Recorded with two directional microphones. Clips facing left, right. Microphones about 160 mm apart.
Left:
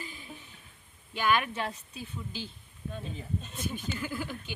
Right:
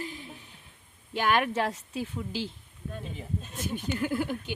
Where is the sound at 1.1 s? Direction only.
55° right (ahead or behind); by 2.5 s 90° right.